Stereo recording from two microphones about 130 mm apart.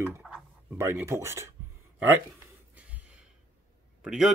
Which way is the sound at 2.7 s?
10° right (ahead or behind).